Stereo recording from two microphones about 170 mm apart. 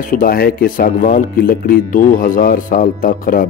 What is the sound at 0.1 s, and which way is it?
Speech, 60° left (ahead or behind).